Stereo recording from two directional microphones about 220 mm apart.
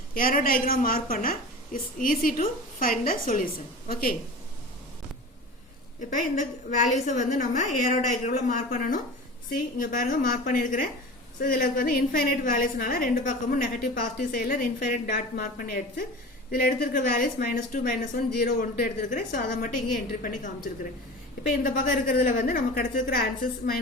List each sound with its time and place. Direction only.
0.1 s a woman's voice: 40° left (ahead or behind)
6.0 s a woman's voice: 35° left (ahead or behind)
21.6 s a woman's voice: 40° left (ahead or behind)